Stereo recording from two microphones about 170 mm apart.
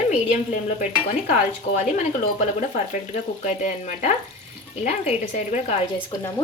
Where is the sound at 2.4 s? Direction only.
45° left (ahead or behind).